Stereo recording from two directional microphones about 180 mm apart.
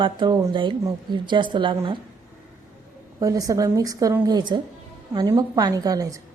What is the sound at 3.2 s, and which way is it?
A woman's voice, 20° right (ahead or behind).